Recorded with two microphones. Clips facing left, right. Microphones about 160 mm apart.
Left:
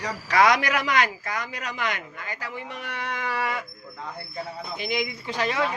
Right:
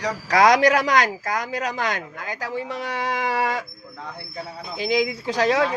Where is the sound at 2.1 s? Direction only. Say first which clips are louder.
Right 6 dB; 90° right.